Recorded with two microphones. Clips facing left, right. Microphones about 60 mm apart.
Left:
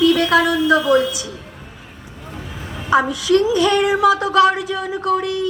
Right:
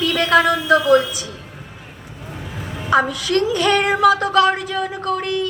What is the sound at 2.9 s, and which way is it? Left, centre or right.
A woman's voice, right.